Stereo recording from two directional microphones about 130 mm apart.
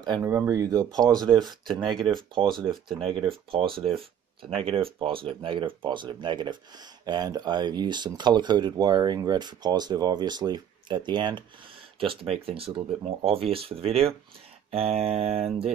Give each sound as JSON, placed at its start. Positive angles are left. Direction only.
{"t": 0.2, "sound": "speech", "side_deg": -20}
{"t": 1.8, "sound": "speech", "side_deg": 0}
{"t": 3.0, "sound": "speech", "side_deg": -45}